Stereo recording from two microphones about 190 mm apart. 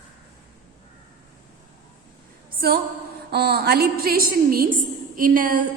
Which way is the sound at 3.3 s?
60° right (ahead or behind).